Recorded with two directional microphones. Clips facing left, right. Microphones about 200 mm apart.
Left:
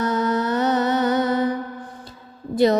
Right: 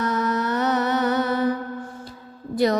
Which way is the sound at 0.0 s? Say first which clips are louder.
Left 2 dB; 30° left (ahead or behind).